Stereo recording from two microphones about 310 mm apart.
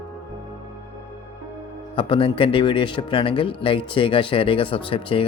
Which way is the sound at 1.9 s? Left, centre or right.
Centre.